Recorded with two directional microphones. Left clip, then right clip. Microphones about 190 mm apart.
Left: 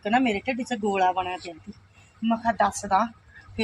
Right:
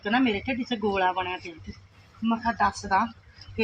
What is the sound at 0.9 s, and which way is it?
Speech, 25° left (ahead or behind).